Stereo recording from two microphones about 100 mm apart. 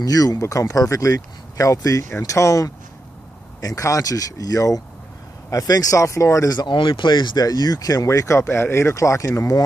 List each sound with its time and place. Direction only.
0.0 s speech: 35° left (ahead or behind)